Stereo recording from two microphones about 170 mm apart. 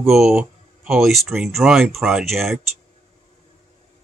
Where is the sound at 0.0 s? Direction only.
5° right (ahead or behind).